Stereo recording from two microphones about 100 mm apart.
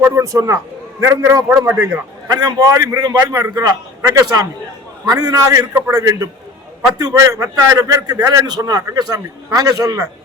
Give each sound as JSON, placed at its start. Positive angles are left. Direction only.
{"t": 0.0, "sound": "a man's voice", "side_deg": -30}
{"t": 2.2, "sound": "a man's voice", "side_deg": -40}